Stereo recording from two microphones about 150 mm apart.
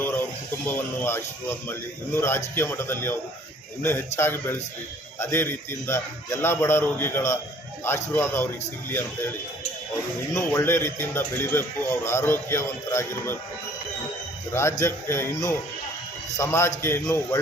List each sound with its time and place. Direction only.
0.6 s speech: 10° left (ahead or behind)
10.3 s speech: 20° left (ahead or behind)
14.5 s speech: 20° left (ahead or behind)